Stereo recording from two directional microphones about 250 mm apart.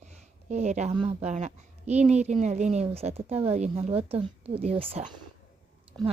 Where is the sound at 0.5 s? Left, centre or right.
Right.